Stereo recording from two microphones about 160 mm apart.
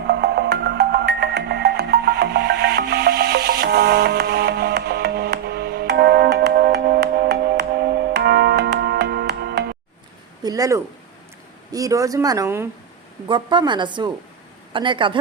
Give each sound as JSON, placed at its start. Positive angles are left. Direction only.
{"t": 0.1, "sound": "music", "side_deg": -90}
{"t": 10.4, "sound": "speech", "side_deg": -20}
{"t": 13.2, "sound": "speech", "side_deg": -30}